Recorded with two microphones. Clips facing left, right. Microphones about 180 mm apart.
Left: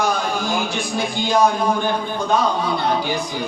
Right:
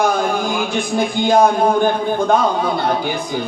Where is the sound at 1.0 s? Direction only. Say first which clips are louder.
Right 4 dB; 55° right (ahead or behind).